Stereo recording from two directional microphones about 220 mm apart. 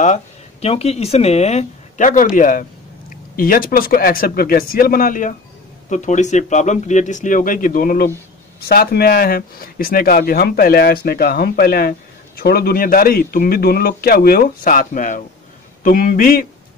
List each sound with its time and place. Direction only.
0.0 s a man's voice: 30° left (ahead or behind)